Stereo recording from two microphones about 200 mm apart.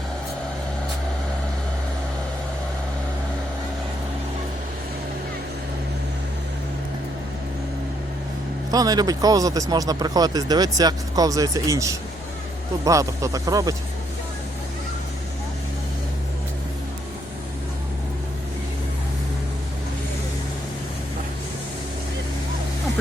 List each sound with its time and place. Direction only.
8.7 s speech: 20° right (ahead or behind)